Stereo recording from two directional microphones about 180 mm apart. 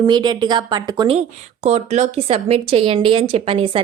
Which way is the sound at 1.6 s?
35° right (ahead or behind).